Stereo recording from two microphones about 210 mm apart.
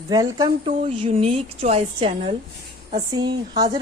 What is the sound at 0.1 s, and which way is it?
A woman's voice, 20° right (ahead or behind).